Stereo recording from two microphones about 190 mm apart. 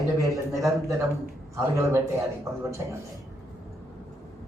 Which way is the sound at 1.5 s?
15° right (ahead or behind).